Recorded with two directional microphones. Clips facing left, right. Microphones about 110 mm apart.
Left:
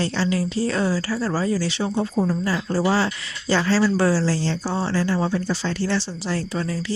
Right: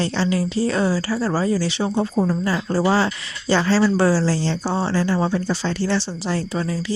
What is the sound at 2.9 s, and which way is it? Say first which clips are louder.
Speech: right 2 dB; 25° right (ahead or behind).